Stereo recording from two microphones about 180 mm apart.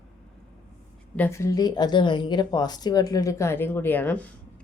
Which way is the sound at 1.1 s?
10° left (ahead or behind).